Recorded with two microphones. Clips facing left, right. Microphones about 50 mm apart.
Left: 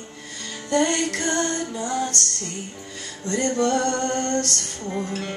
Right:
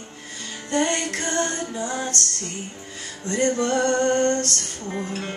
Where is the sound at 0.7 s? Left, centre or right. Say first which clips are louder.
Left 2 dB; right.